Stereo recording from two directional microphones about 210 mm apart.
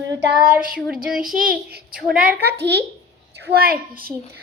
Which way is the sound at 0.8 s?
Centre (ahead or behind).